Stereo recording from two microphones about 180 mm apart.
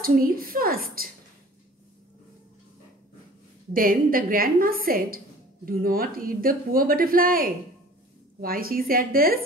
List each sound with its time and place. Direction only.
0.0 s speech: 55° right (ahead or behind)
3.7 s a woman's voice: 50° right (ahead or behind)